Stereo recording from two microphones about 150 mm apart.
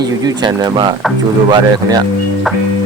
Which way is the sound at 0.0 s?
25° right (ahead or behind).